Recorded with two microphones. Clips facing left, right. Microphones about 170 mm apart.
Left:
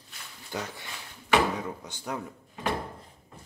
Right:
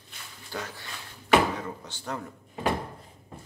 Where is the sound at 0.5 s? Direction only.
20° left (ahead or behind).